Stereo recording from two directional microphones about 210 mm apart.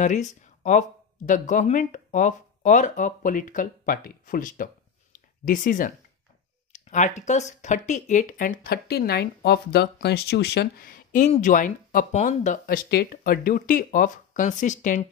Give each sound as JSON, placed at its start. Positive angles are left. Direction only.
{"t": 0.0, "sound": "speech", "side_deg": 35}